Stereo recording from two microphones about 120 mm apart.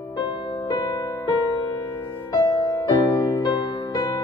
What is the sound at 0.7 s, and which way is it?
Music, 30° left (ahead or behind).